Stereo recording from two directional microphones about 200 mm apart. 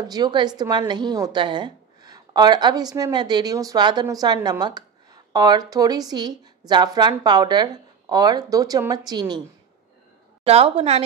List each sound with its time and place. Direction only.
0.1 s a woman's voice: 20° right (ahead or behind)
10.4 s a woman's voice: 30° right (ahead or behind)